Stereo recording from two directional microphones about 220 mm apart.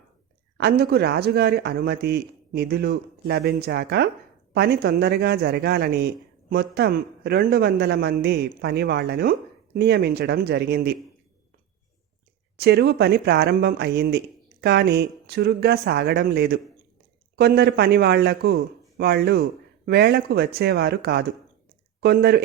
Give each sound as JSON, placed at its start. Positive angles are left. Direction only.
{"t": 0.5, "sound": "speech", "side_deg": -45}
{"t": 12.5, "sound": "speech", "side_deg": -45}